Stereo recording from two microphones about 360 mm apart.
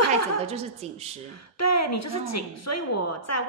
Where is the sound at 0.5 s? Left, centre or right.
Centre.